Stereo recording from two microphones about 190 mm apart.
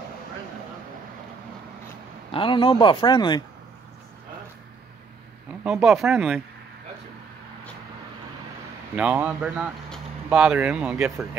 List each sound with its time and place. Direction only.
2.3 s speech: 25° left (ahead or behind)
5.6 s speech: 5° right (ahead or behind)
8.9 s speech: 5° right (ahead or behind)